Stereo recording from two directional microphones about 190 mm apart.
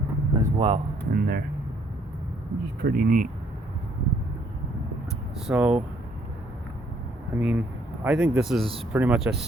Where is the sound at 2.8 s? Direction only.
55° right (ahead or behind).